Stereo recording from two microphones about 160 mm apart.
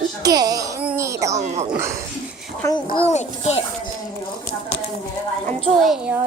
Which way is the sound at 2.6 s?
15° left (ahead or behind).